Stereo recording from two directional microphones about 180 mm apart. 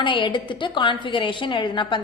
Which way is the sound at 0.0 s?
25° left (ahead or behind).